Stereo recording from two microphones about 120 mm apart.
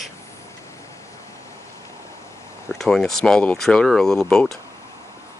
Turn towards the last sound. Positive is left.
turn(degrees=5)  # may be behind; listen again after turning